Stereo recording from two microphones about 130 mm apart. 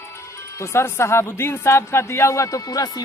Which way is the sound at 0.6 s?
20° left (ahead or behind).